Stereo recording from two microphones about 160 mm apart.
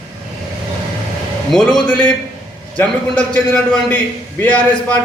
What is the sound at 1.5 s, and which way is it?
A man's voice, centre (ahead or behind).